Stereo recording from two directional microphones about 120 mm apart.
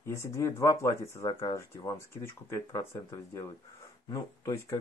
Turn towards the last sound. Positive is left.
turn(degrees=25)  # may be behind; listen again after turning